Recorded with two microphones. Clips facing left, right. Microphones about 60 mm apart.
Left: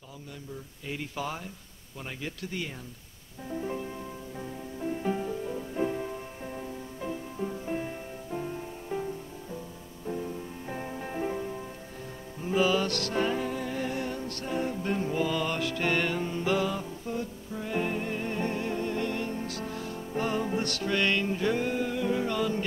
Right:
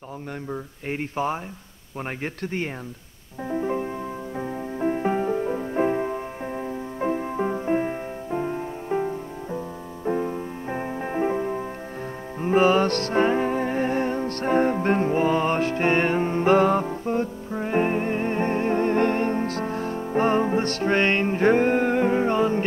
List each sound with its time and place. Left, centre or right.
0.5 s speech: right
3.4 s music: right